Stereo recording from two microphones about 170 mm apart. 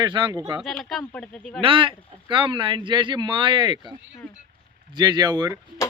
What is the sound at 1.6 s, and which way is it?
Speech, 30° right (ahead or behind).